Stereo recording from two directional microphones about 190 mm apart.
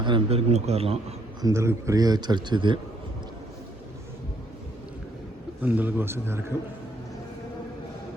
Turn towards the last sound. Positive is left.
turn(degrees=-15)  # may be behind; listen again after turning